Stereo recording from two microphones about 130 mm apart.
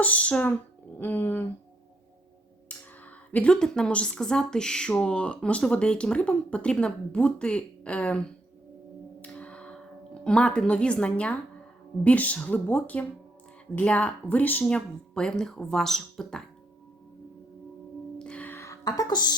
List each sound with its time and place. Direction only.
0.0 s speech: 10° left (ahead or behind)
3.3 s speech: 5° left (ahead or behind)
9.2 s a sound: 10° left (ahead or behind)
10.2 s speech: 5° left (ahead or behind)
18.2 s music: 10° left (ahead or behind); by 19.3 s 30° left (ahead or behind)